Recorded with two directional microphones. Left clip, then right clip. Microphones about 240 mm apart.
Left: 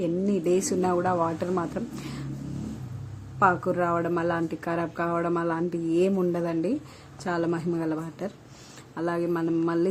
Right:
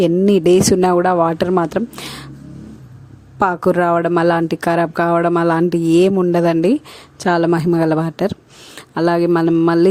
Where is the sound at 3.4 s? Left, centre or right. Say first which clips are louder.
Right 8 dB; right.